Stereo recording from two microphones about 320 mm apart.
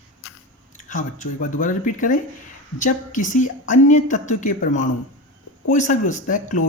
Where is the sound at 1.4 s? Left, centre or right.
Left.